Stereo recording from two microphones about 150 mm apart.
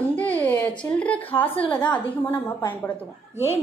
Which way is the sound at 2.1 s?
10° left (ahead or behind).